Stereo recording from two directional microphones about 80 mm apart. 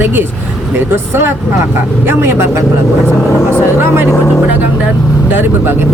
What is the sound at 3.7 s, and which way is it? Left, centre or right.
Speech, right.